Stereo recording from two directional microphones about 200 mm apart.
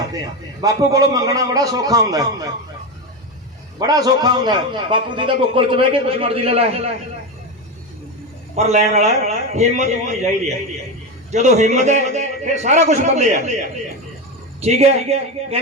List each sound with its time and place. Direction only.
0.6 s a man's voice: 20° right (ahead or behind)
3.8 s a man's voice: 20° right (ahead or behind)
8.5 s a man's voice: 35° right (ahead or behind)